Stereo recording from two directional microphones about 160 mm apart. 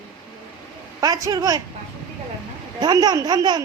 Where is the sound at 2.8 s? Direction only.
25° right (ahead or behind).